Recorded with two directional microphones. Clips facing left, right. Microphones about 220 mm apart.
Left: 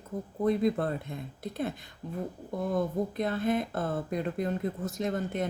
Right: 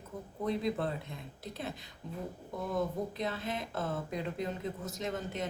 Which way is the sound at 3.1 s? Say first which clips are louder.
Left 8 dB; 50° left (ahead or behind).